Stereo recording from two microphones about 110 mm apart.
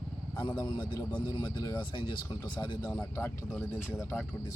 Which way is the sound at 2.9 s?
25° left (ahead or behind).